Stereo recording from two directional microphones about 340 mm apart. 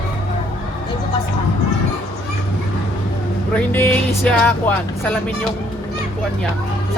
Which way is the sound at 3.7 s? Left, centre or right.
Centre.